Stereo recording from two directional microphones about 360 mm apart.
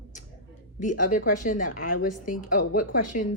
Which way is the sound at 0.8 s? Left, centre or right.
Left.